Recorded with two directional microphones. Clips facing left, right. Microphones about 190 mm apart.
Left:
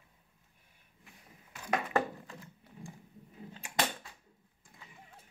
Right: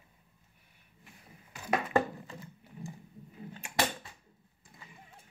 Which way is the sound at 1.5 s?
5° right (ahead or behind).